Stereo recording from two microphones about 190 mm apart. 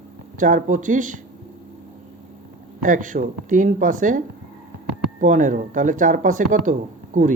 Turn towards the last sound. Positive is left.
turn(degrees=-40)  # may be behind; listen again after turning